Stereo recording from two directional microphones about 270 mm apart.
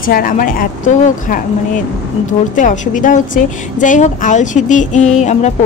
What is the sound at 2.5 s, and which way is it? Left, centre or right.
A woman's voice, left.